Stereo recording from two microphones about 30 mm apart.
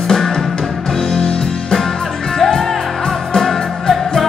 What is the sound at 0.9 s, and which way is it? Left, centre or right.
Music, centre.